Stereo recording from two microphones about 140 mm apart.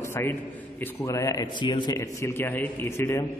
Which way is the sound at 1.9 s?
15° left (ahead or behind).